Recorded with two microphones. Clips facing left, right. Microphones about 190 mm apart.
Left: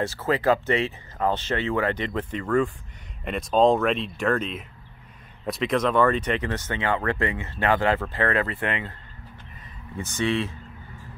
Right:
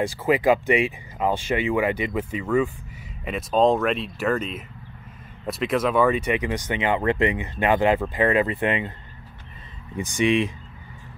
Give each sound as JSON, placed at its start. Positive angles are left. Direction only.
{"t": 0.0, "sound": "speech", "side_deg": -15}
{"t": 9.9, "sound": "speech", "side_deg": -15}